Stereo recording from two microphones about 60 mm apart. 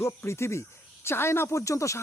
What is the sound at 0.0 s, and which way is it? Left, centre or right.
Speech, left.